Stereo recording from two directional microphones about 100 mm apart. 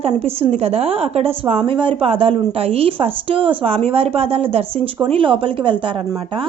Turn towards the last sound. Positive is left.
turn(degrees=-55)  # may be behind; listen again after turning